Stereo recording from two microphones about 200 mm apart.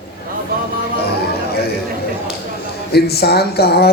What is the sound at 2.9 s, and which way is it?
A man's voice, 55° left (ahead or behind).